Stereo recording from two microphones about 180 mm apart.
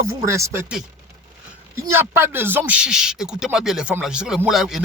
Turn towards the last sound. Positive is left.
turn(degrees=0)  # may be behind; listen again after turning